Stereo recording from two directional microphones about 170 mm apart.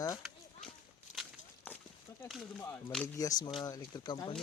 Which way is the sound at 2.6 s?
10° left (ahead or behind).